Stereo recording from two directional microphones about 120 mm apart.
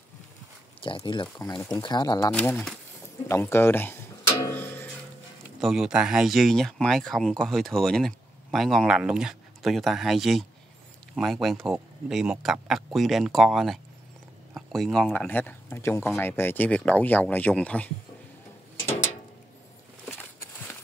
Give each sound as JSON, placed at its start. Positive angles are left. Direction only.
{"t": 0.7, "sound": "speech", "side_deg": 45}
{"t": 2.3, "sound": "speech", "side_deg": 15}
{"t": 4.5, "sound": "music", "side_deg": 15}
{"t": 5.6, "sound": "speech", "side_deg": -5}